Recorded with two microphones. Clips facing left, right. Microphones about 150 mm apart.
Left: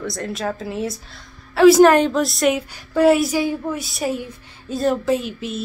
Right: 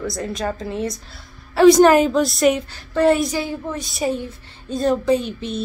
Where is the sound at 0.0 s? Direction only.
Centre (ahead or behind).